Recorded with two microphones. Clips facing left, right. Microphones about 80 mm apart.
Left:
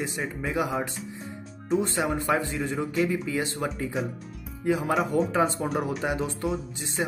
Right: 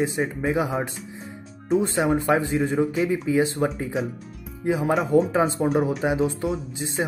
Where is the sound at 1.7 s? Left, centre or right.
Centre.